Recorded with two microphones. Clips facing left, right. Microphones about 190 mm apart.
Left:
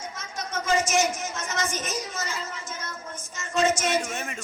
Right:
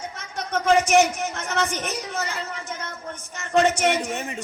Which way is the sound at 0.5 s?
60° right (ahead or behind).